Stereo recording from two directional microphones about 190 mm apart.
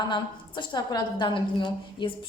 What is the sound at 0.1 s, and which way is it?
A woman's voice, 25° left (ahead or behind).